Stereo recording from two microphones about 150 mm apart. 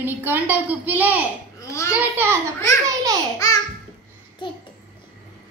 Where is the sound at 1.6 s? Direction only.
20° left (ahead or behind).